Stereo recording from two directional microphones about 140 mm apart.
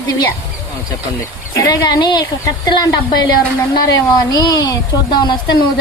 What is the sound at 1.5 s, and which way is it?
A woman's voice, 25° left (ahead or behind).